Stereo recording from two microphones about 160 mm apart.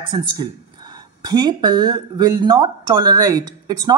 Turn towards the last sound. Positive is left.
turn(degrees=-25)  # may be behind; listen again after turning